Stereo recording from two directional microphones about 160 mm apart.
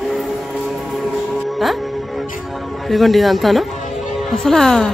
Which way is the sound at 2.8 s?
Centre (ahead or behind).